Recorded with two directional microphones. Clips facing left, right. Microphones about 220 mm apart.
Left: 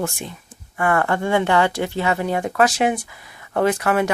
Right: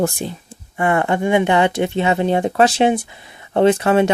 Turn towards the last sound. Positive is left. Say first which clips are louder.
# right 5 dB
turn(degrees=-25)  # may be behind; listen again after turning